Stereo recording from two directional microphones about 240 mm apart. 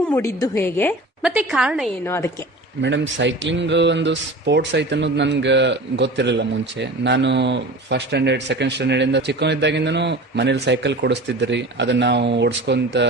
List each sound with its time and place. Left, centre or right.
0.1 s a woman's voice: centre
1.2 s a woman's voice: centre
2.0 s a woman's voice: centre
2.8 s speech: right